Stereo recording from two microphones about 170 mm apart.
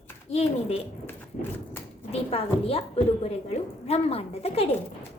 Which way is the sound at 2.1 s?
35° left (ahead or behind).